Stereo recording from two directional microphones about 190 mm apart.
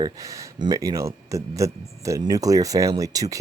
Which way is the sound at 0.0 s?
15° right (ahead or behind).